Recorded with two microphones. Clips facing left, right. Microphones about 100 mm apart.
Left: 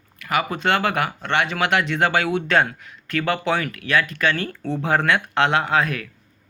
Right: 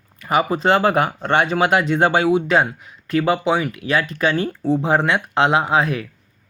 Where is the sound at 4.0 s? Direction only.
30° right (ahead or behind).